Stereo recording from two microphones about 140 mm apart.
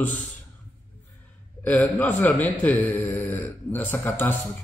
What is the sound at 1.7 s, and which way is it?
A man's voice, 10° left (ahead or behind).